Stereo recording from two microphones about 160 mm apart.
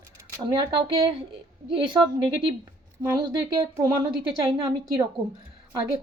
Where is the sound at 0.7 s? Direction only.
35° right (ahead or behind).